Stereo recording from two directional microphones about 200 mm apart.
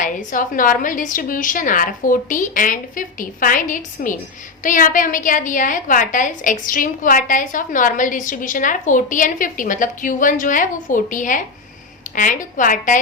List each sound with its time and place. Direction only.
0.0 s a woman's voice: 40° left (ahead or behind)